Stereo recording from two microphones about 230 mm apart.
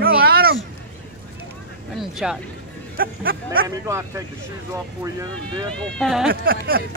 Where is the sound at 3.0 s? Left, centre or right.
Right.